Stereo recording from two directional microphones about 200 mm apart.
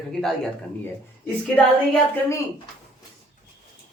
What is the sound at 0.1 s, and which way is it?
Speech, centre (ahead or behind).